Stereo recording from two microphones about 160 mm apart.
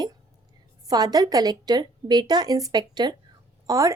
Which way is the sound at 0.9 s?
25° right (ahead or behind).